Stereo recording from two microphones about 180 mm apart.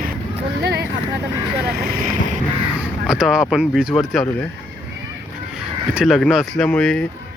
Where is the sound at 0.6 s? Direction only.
65° right (ahead or behind).